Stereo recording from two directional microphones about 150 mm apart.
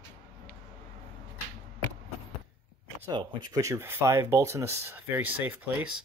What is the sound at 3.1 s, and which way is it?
Speech, 30° right (ahead or behind).